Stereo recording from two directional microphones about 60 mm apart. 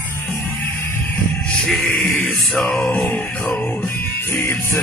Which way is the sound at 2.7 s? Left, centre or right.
Left.